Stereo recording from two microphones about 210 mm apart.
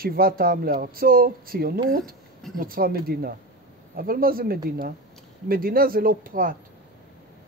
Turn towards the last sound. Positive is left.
turn(degrees=-40)  # may be behind; listen again after turning